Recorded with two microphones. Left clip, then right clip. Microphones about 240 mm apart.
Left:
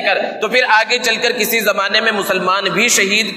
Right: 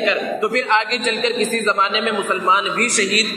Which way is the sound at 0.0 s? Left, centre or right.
Left.